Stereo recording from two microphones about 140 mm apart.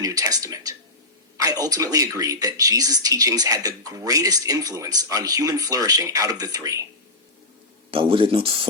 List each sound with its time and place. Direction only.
0.0 s a sound: 25° right (ahead or behind)
1.4 s speech: 25° right (ahead or behind)
7.9 s speech: 40° right (ahead or behind)